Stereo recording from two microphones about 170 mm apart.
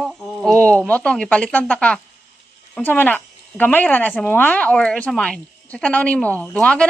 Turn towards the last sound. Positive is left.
turn(degrees=5)  # may be behind; listen again after turning